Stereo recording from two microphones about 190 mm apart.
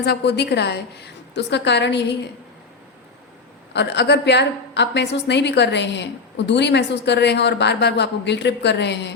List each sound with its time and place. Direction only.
0.0 s a woman's voice: 60° left (ahead or behind)
3.7 s a woman's voice: 65° left (ahead or behind)